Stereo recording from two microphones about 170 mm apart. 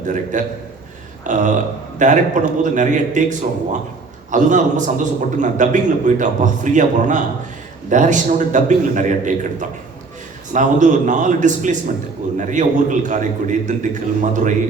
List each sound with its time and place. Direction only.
0.0 s a man's voice: 50° right (ahead or behind)